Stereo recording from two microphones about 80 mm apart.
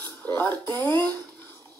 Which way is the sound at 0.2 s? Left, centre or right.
Left.